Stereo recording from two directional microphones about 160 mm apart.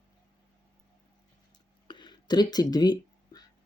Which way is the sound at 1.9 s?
30° left (ahead or behind).